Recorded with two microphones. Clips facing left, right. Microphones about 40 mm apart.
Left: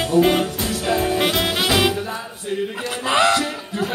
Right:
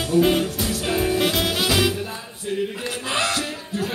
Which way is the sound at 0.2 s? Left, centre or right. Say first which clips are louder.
Left 2 dB; left.